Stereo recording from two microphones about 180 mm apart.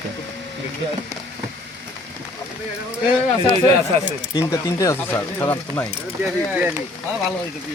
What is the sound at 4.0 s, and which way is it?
Speech, 20° left (ahead or behind).